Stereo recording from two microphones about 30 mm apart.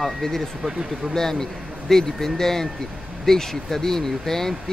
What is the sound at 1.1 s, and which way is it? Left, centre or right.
Speech, centre.